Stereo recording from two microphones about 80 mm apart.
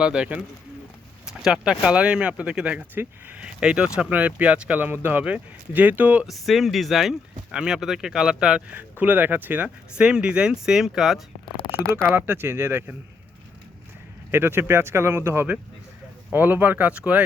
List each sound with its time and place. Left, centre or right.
0.0 s speech: centre
6.2 s speech: centre
8.8 s speech: right
9.6 s speech: centre
12.1 s speech: right
14.3 s speech: right